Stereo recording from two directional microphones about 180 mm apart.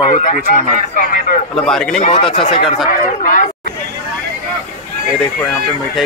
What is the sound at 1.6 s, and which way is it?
Speech, 5° left (ahead or behind).